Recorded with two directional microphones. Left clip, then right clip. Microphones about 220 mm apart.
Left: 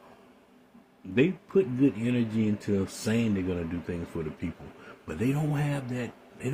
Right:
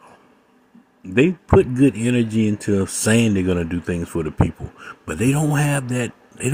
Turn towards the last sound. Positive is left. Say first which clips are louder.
# right 10 dB
turn(degrees=-45)  # may be behind; listen again after turning